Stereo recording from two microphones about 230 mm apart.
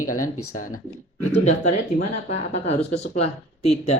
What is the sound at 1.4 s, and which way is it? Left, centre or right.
Speech, left.